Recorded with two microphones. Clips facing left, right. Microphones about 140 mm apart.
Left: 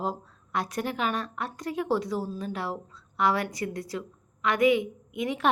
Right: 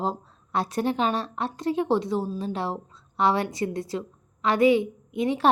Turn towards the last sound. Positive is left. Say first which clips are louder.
# right 5 dB
turn(degrees=-30)  # may be behind; listen again after turning